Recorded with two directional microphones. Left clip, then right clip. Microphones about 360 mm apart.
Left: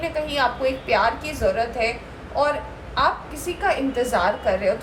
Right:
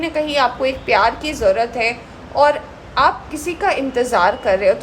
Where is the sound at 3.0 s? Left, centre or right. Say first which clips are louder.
Right 6 dB; right.